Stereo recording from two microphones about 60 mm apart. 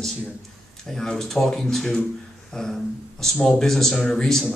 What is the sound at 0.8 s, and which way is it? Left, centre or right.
A man's voice, centre.